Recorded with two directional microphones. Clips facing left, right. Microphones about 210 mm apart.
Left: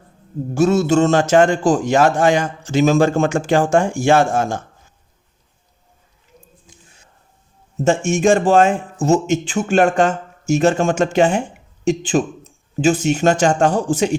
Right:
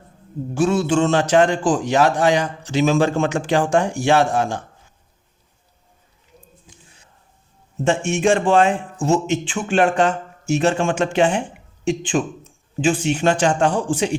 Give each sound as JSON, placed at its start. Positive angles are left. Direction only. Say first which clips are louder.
{"t": 0.5, "sound": "a man's voice", "louder": "left 3 dB", "side_deg": 40}
{"t": 7.9, "sound": "a man's voice", "louder": "left 3 dB", "side_deg": 45}